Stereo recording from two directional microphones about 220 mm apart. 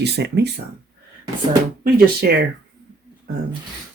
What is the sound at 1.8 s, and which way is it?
Speech, 45° right (ahead or behind).